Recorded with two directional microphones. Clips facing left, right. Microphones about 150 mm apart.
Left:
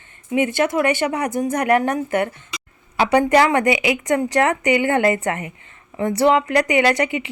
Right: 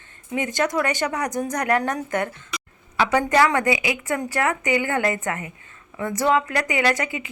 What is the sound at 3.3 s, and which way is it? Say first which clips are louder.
A woman's voice: left 3 dB; 20° left (ahead or behind).